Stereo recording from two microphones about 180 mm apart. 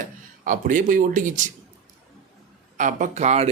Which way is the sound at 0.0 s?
45° right (ahead or behind).